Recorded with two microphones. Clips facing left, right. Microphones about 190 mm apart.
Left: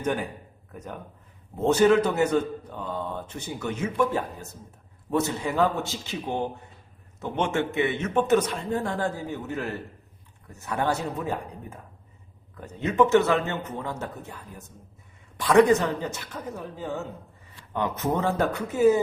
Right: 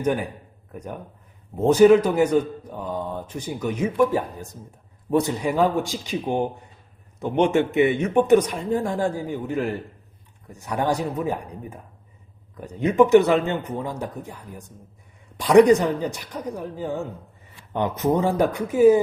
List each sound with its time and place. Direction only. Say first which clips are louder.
0.0 s a man's voice: right 4 dB; 10° right (ahead or behind)
12.5 s a man's voice: right 4 dB; 15° right (ahead or behind)
15.4 s a man's voice: right 4 dB; 15° right (ahead or behind)